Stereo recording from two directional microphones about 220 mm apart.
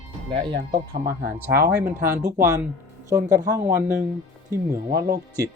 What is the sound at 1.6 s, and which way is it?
Speech, 10° right (ahead or behind).